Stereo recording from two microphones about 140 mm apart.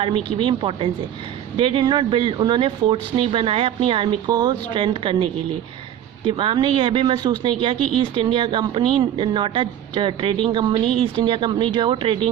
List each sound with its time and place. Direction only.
0.3 s speech: 35° right (ahead or behind)